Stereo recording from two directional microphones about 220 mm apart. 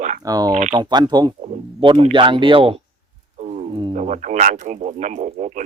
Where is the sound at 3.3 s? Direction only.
30° right (ahead or behind).